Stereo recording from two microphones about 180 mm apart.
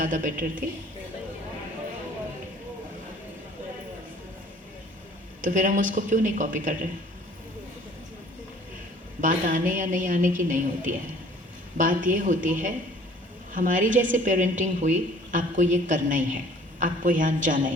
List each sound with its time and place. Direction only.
0.0 s a woman's voice: 45° right (ahead or behind)
5.4 s a woman's voice: 45° right (ahead or behind)
9.2 s a woman's voice: 45° right (ahead or behind)